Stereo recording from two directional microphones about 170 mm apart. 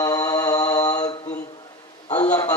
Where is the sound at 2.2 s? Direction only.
20° left (ahead or behind).